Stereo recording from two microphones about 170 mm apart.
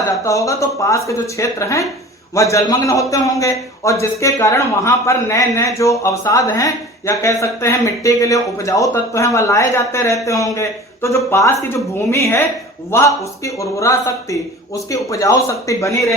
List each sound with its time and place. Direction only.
0.3 s a man's voice: 20° left (ahead or behind)